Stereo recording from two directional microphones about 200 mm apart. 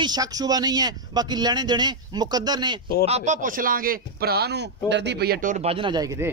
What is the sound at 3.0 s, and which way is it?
A man's voice, 35° right (ahead or behind).